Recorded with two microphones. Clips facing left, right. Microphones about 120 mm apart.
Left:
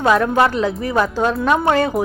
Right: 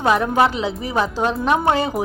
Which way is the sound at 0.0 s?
15° right (ahead or behind).